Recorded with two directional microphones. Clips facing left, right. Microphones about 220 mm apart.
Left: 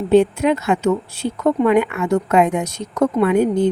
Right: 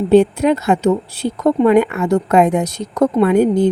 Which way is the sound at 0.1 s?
35° right (ahead or behind).